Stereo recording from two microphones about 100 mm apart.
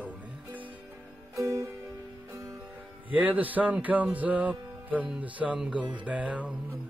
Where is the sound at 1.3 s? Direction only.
30° right (ahead or behind).